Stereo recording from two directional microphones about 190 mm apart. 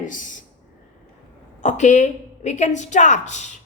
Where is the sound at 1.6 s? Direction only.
40° left (ahead or behind).